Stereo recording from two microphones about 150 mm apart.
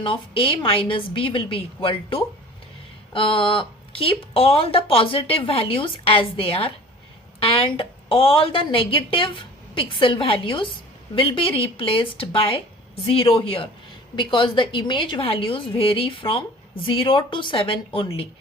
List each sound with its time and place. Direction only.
0.0 s speech: 35° left (ahead or behind)